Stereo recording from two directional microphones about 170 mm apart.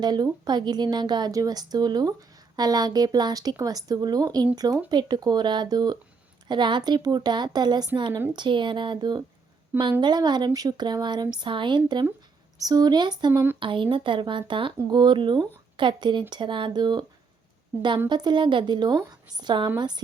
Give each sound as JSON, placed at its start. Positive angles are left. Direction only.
{"t": 0.0, "sound": "speech", "side_deg": -25}
{"t": 18.1, "sound": "speech", "side_deg": -25}